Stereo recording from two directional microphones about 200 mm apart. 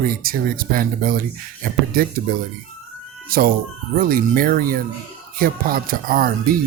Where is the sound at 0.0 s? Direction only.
45° right (ahead or behind).